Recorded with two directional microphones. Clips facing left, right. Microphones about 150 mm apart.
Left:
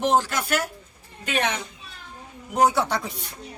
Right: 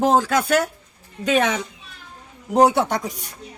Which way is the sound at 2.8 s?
45° right (ahead or behind).